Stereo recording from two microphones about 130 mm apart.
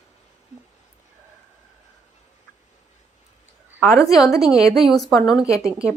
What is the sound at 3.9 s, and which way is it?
Speech, 25° left (ahead or behind).